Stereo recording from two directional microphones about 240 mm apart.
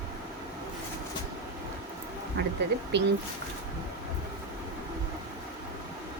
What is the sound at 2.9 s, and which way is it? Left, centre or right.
Speech, right.